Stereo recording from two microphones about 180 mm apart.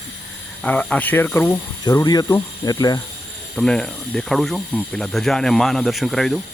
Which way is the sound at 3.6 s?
5° left (ahead or behind).